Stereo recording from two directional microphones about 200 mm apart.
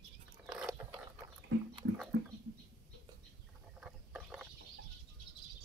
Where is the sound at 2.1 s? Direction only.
70° right (ahead or behind).